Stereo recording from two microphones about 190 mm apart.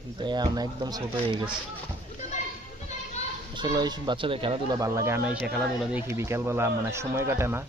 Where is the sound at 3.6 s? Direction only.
20° right (ahead or behind).